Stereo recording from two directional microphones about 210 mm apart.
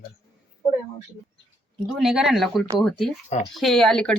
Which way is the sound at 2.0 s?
Centre (ahead or behind).